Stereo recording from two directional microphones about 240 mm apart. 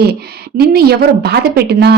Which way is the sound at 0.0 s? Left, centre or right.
Right.